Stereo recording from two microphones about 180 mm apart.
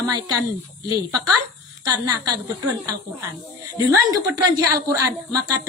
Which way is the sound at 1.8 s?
20° right (ahead or behind).